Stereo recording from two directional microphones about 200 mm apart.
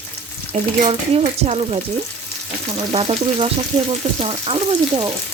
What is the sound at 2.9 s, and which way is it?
Speech, 30° right (ahead or behind).